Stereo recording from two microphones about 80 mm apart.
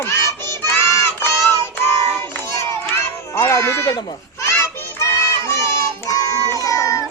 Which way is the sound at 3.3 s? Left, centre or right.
Left.